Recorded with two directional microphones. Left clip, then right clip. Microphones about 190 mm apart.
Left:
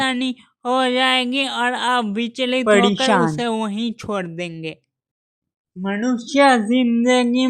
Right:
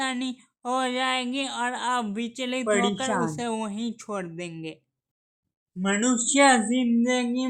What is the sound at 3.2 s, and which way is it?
Speech, 25° left (ahead or behind).